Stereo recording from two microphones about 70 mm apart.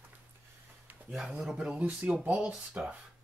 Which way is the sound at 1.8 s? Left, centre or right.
Centre.